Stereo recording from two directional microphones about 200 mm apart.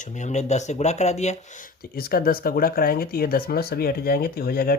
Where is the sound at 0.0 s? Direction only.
35° left (ahead or behind).